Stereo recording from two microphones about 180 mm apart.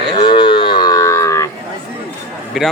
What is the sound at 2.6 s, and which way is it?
Speech, centre (ahead or behind).